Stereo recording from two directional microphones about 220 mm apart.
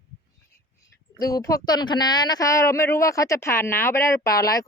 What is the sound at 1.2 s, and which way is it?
Speech, 15° left (ahead or behind).